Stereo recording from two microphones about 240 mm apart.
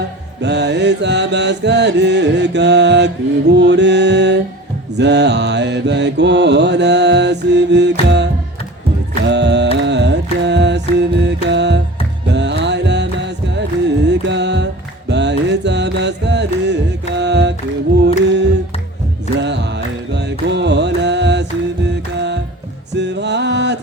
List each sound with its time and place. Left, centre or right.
0.4 s music: right
4.9 s mantra: right
9.2 s music: right
18.3 s a capella: right
20.1 s music: right
23.0 s music: right